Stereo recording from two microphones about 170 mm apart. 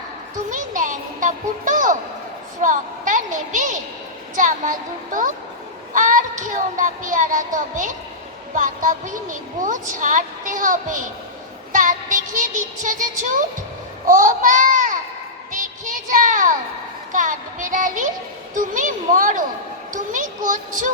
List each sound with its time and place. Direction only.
0.5 s a child's voice: 50° right (ahead or behind)
11.7 s child singing: 50° right (ahead or behind)
14.1 s speech: 50° right (ahead or behind)
15.5 s a sound: 50° right (ahead or behind)
17.1 s speech: 50° right (ahead or behind)
19.9 s a sound: 50° right (ahead or behind)